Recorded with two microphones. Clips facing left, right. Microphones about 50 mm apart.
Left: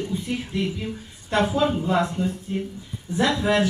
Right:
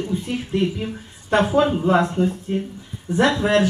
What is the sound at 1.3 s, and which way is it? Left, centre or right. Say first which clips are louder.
Speech: right 4 dB; right.